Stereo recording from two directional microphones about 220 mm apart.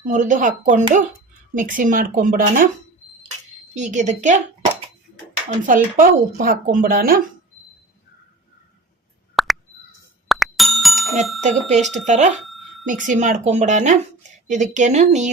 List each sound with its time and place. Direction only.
0.1 s a woman's voice: 35° right (ahead or behind)
3.8 s a woman's voice: 35° right (ahead or behind)
9.3 s plop: centre (ahead or behind)
10.2 s music: centre (ahead or behind)
11.4 s a woman's voice: 35° right (ahead or behind)